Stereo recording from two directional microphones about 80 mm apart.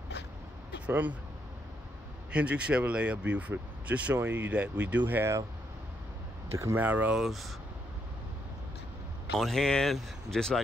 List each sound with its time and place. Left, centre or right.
0.7 s a sound: centre
2.3 s speech: centre
6.5 s speech: right
6.8 s speech: right
7.2 s speech: centre
9.4 s speech: centre